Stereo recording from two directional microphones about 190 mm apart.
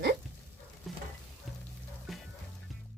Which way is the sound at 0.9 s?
Centre (ahead or behind).